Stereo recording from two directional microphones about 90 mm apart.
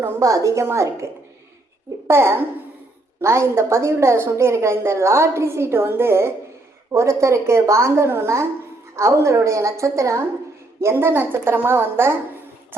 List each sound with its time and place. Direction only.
0.0 s a woman's voice: 40° right (ahead or behind)